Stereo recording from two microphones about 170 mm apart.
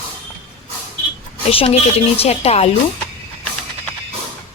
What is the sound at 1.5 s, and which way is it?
Speech, 35° left (ahead or behind).